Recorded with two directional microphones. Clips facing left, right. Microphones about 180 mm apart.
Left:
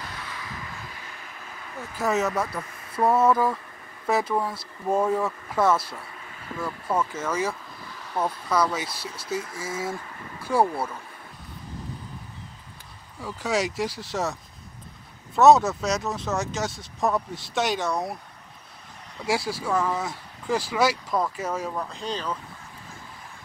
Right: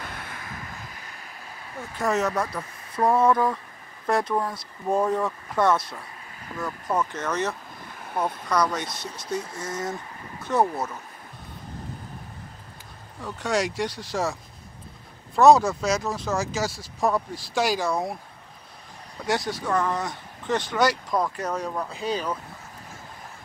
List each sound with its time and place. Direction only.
0.0 s vehicle: 55° right (ahead or behind)
2.0 s speech: 5° left (ahead or behind)
13.2 s speech: 5° left (ahead or behind)
15.3 s speech: centre (ahead or behind)
19.2 s speech: 5° left (ahead or behind)
21.8 s speech: 5° right (ahead or behind)